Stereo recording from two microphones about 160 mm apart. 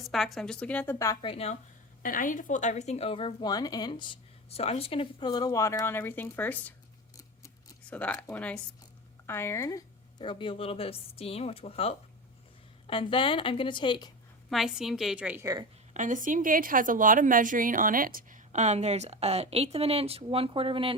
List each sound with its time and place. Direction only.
0.0 s a woman's voice: centre (ahead or behind)
0.9 s a woman's voice: 20° left (ahead or behind)
1.2 s speech: 35° left (ahead or behind)
2.0 s speech: 55° left (ahead or behind); by 6.7 s 10° left (ahead or behind)
7.9 s speech: 10° left (ahead or behind); by 14.1 s 30° left (ahead or behind)
14.5 s a woman's voice: 5° right (ahead or behind)
15.9 s a woman's voice: 50° right (ahead or behind); by 20.9 s 35° right (ahead or behind)